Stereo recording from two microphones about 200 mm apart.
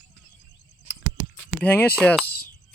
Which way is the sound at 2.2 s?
50° left (ahead or behind).